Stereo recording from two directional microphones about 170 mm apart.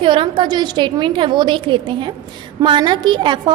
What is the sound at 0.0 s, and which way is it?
A woman's voice, 30° right (ahead or behind).